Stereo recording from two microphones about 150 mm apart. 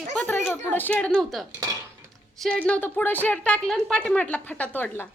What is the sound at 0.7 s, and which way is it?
Speech, 10° left (ahead or behind).